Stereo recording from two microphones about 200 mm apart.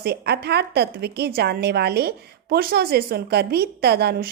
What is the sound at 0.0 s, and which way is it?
A woman's voice, 55° right (ahead or behind).